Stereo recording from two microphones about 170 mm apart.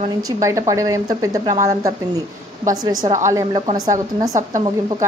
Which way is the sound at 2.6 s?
20° right (ahead or behind).